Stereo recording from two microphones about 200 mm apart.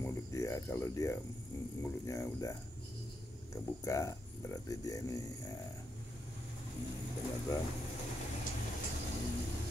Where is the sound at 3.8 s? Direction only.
15° left (ahead or behind).